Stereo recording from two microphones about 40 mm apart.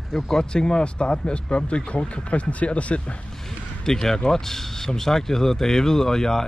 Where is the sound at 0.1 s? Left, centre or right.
Centre; by 3.2 s left.